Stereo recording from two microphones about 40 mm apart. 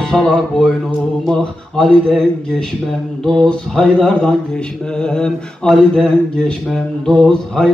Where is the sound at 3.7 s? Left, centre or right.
Centre.